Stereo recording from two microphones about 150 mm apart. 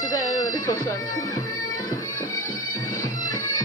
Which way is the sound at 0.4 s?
25° left (ahead or behind).